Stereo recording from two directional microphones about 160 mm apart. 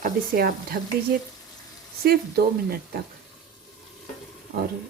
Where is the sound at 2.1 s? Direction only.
75° right (ahead or behind).